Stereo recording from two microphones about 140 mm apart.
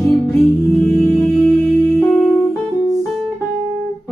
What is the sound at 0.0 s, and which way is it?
Music, 5° left (ahead or behind).